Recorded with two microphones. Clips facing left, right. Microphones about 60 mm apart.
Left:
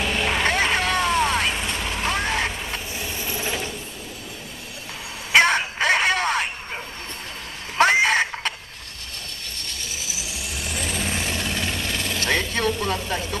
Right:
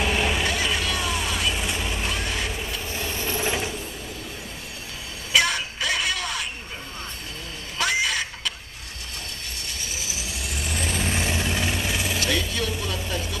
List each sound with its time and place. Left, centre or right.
0.0 s vehicle: centre
0.4 s vehicle: left
1.5 s vehicle: centre
2.0 s a sound: left
2.9 s train: centre
3.4 s mechanisms: centre
5.3 s a sound: left
7.7 s a sound: left
10.6 s vehicle: centre
12.2 s vehicle: left